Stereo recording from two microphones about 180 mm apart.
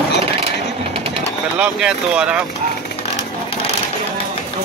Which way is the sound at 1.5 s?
5° right (ahead or behind).